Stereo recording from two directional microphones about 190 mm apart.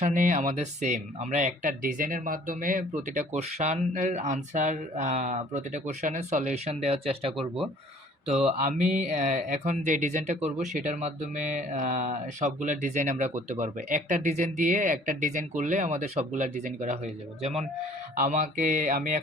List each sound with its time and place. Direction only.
0.0 s speech: 45° right (ahead or behind)
8.5 s speech: 40° right (ahead or behind)